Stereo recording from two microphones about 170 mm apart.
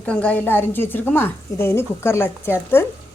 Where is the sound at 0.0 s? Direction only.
5° left (ahead or behind).